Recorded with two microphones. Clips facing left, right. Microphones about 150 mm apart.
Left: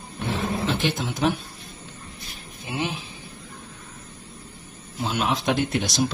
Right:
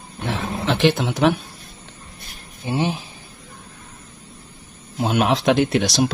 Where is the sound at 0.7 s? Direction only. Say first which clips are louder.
Right 7 dB; 75° right (ahead or behind).